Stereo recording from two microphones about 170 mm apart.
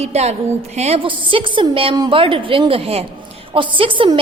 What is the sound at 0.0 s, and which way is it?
A woman's voice, 40° right (ahead or behind).